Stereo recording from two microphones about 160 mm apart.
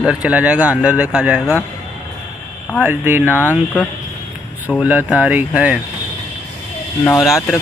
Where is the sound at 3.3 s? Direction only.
15° left (ahead or behind).